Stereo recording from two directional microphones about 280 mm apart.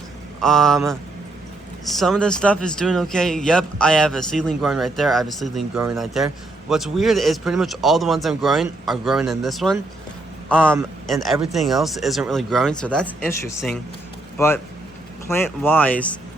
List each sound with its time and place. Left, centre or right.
0.3 s speech: centre
14.3 s speech: centre